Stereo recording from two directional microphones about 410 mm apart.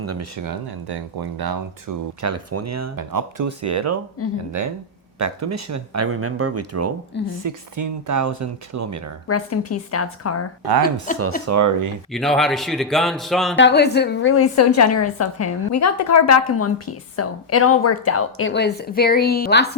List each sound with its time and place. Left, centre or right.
0.0 s speech: right
0.4 s speech: right
4.2 s a woman's voice: left
5.2 s speech: right
9.2 s a woman's voice: left
11.1 s a woman's voice: centre
11.4 s speech: right
12.1 s speech: centre
13.6 s a woman's voice: left